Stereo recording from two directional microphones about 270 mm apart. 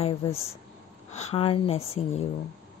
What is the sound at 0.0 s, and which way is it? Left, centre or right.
Speech, left.